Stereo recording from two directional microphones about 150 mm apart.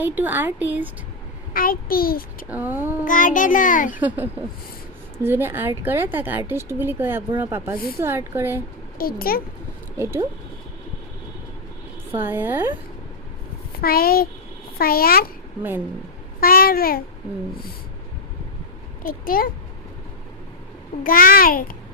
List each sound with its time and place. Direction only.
0.0 s speech: 10° right (ahead or behind)
1.5 s a child's voice: 75° left (ahead or behind)
2.5 s speech: 10° right (ahead or behind)
3.0 s a child's voice: 60° left (ahead or behind)
4.0 s speech: 10° right (ahead or behind)
9.0 s a child's voice: 75° left (ahead or behind)
10.0 s speech: 15° right (ahead or behind)
12.1 s speech: 15° right (ahead or behind)
13.7 s a child's voice: 85° left
16.4 s a child's voice: 85° left
19.0 s a child's voice: 70° left (ahead or behind)
21.0 s a child's voice: 70° left (ahead or behind)